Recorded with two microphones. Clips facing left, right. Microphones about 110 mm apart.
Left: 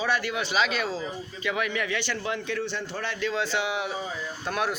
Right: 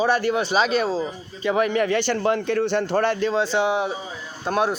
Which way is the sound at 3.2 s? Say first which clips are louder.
Right 7 dB; 30° right (ahead or behind).